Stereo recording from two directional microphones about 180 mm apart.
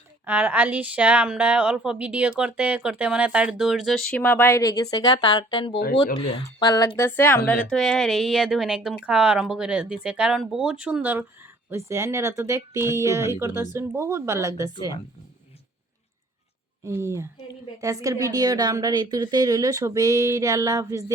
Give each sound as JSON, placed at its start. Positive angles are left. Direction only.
{"t": 0.3, "sound": "a woman's voice", "side_deg": -10}
{"t": 16.8, "sound": "a woman's voice", "side_deg": -15}